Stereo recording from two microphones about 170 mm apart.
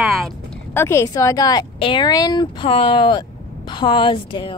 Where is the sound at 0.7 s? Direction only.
15° left (ahead or behind).